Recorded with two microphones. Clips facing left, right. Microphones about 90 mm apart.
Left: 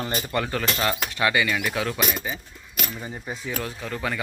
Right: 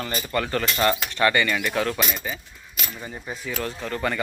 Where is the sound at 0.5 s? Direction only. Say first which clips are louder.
Right 6 dB; 5° left (ahead or behind).